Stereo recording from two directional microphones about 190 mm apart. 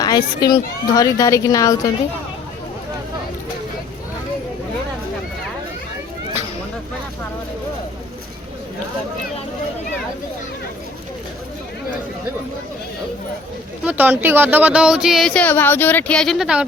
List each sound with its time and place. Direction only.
0.0 s a woman's voice: 20° left (ahead or behind)
13.8 s speech: 10° right (ahead or behind)